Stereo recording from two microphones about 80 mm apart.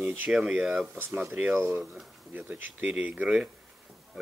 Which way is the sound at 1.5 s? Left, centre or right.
Right.